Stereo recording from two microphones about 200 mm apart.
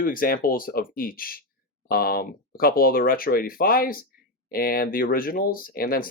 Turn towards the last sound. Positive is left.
turn(degrees=45)  # may be behind; listen again after turning